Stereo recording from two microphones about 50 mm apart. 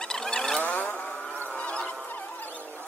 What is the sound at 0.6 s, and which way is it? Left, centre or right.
Vehicle, left.